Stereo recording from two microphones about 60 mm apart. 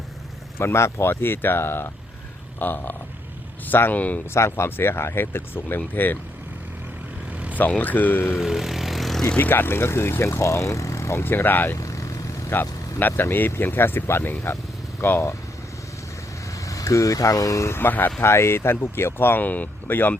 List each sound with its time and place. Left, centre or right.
0.6 s speech: left
4.4 s speech: left
7.3 s vehicle: right
7.8 s speech: left
8.3 s vehicle: centre
9.4 s speech: left
11.2 s speech: left
11.8 s vehicle: left
12.5 s speech: left
16.6 s speech: left
17.7 s speech: left
18.3 s speech: left